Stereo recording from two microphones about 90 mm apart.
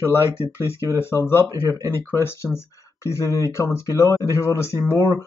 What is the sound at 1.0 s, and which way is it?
Speech, 25° left (ahead or behind).